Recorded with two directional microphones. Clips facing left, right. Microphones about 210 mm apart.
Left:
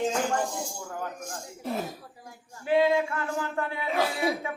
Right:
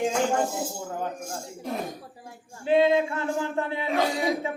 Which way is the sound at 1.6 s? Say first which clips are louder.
Even; 5° left (ahead or behind).